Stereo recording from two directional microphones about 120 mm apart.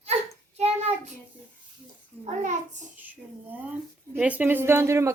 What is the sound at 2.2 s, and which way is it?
Speech, 85° right.